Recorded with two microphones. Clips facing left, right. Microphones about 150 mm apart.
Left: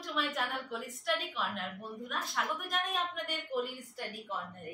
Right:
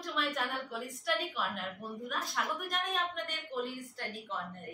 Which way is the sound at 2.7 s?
5° left (ahead or behind).